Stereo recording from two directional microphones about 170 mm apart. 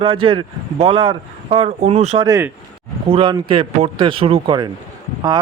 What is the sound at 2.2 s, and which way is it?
Speech, 20° right (ahead or behind).